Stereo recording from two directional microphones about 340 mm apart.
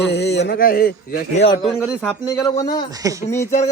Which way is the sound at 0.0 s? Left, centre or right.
Left.